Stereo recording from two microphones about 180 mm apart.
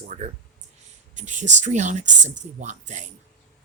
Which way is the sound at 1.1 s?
45° right (ahead or behind).